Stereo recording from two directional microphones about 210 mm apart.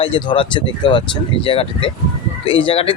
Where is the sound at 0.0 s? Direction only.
25° left (ahead or behind).